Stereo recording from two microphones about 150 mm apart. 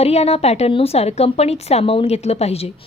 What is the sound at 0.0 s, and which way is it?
A woman's voice, 45° left (ahead or behind).